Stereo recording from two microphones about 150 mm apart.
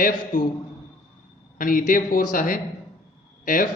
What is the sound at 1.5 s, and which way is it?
A man's voice, 65° left (ahead or behind).